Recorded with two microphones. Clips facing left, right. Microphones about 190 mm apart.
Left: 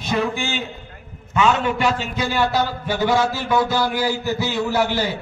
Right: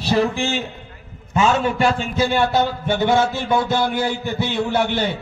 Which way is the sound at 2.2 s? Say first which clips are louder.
Right 4 dB; 25° right (ahead or behind).